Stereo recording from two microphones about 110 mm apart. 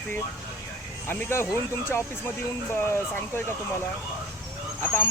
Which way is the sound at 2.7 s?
20° left (ahead or behind).